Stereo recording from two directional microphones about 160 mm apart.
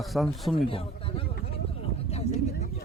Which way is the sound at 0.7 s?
35° left (ahead or behind).